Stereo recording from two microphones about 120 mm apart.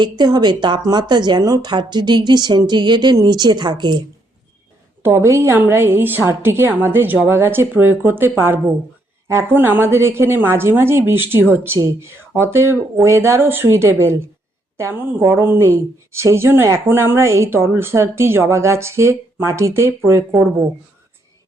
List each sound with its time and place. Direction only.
0.0 s speech: 35° right (ahead or behind)
5.0 s a woman's voice: 25° right (ahead or behind)